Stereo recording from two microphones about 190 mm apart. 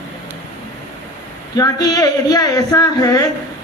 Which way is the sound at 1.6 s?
20° left (ahead or behind).